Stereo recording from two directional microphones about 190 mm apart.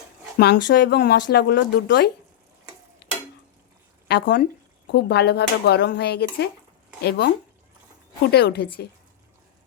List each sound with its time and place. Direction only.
0.3 s speech: 60° left (ahead or behind)
3.0 s stir: 60° left (ahead or behind)
4.1 s speech: 55° left (ahead or behind)
8.3 s speech: 60° left (ahead or behind)